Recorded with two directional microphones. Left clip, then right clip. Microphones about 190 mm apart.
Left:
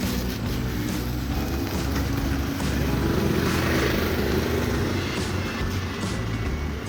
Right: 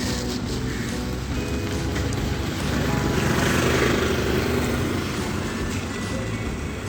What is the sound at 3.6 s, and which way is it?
Vehicle, 55° right (ahead or behind).